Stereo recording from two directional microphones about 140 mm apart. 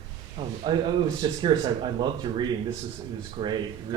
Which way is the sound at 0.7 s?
30° right (ahead or behind).